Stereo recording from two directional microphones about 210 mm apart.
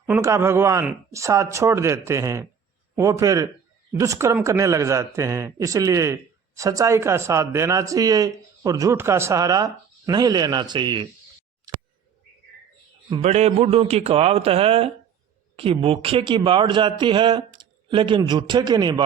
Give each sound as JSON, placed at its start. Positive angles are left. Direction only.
{"t": 0.0, "sound": "speech", "side_deg": -10}
{"t": 13.1, "sound": "a man's voice", "side_deg": -30}